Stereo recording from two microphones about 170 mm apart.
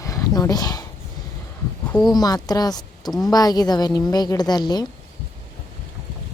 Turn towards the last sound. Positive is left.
turn(degrees=25)  # may be behind; listen again after turning